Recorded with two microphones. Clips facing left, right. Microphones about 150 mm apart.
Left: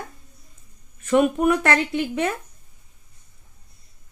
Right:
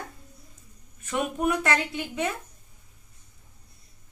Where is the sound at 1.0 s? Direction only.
60° left (ahead or behind).